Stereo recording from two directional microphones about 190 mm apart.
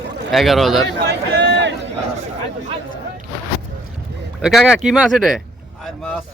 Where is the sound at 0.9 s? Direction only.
65° right (ahead or behind).